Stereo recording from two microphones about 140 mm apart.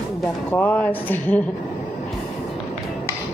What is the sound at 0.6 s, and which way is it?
Speech, 15° left (ahead or behind).